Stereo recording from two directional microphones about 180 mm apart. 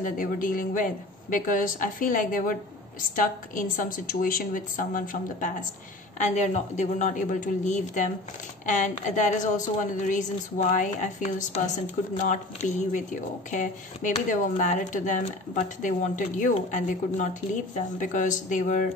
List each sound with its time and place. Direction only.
0.0 s a woman's voice: 50° left (ahead or behind)